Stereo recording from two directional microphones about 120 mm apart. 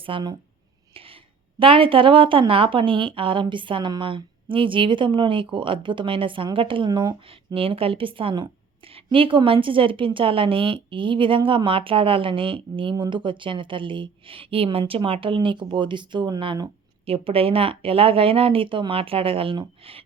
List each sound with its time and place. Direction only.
0.0 s a woman's voice: 45° right (ahead or behind)
7.3 s a woman's voice: 50° right (ahead or behind)
17.1 s a woman's voice: 50° right (ahead or behind)